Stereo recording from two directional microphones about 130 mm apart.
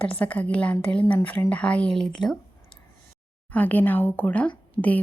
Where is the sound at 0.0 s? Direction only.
10° left (ahead or behind).